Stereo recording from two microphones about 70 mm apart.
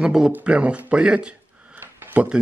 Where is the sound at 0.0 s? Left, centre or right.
Centre.